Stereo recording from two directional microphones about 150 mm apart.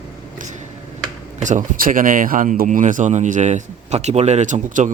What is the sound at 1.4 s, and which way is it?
Speech, 60° right (ahead or behind).